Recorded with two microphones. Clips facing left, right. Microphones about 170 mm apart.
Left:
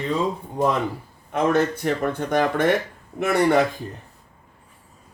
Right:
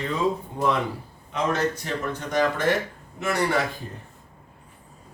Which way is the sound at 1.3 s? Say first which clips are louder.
Left 5 dB; 55° left (ahead or behind).